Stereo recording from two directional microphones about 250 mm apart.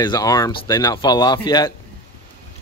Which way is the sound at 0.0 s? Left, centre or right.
Centre.